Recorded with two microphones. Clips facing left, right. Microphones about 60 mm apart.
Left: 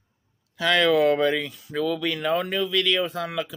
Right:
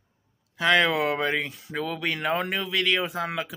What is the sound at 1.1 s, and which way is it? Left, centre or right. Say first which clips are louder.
Speech: left 4 dB; right.